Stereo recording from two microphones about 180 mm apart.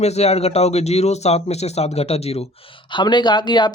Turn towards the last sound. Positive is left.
turn(degrees=25)  # may be behind; listen again after turning